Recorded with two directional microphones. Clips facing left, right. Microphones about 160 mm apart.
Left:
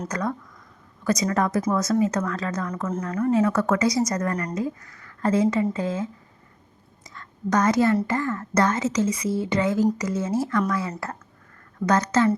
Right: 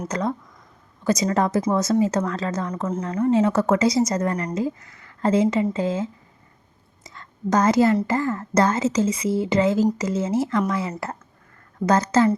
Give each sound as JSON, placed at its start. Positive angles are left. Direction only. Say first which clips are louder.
{"t": 0.1, "sound": "speech", "louder": "right 2 dB", "side_deg": -25}
{"t": 7.0, "sound": "a sound", "louder": "right 2 dB", "side_deg": -25}
{"t": 8.0, "sound": "speech", "louder": "right 2 dB", "side_deg": -30}